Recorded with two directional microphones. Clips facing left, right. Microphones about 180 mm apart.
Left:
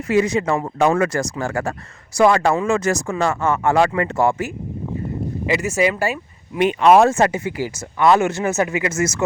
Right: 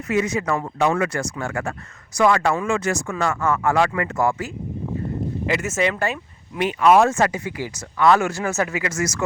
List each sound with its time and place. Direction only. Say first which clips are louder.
0.1 s speech: left 4 dB; 30° left (ahead or behind)
0.8 s speech: left 4 dB; 45° left (ahead or behind); by 4.4 s 30° left (ahead or behind)
5.5 s speech: left 4 dB; 10° left (ahead or behind)
6.6 s speech: left 3 dB; 25° left (ahead or behind)